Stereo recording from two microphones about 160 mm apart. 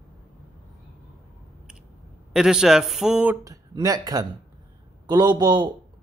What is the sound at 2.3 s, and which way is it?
Speech, 5° right (ahead or behind).